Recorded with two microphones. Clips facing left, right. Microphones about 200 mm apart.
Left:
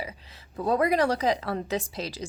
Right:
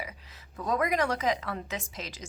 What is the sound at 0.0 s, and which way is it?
A woman's voice, 30° left (ahead or behind).